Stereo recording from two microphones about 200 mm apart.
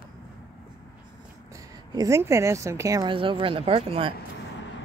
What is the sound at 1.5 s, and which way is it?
Speech, 15° right (ahead or behind).